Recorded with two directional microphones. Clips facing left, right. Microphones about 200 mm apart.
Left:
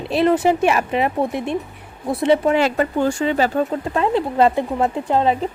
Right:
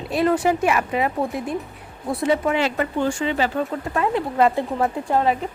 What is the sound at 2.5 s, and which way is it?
Speech, 40° left (ahead or behind).